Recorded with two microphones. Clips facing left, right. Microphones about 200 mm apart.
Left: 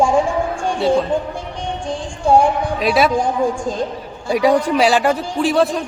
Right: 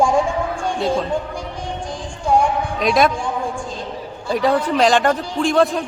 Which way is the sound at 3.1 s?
40° left (ahead or behind).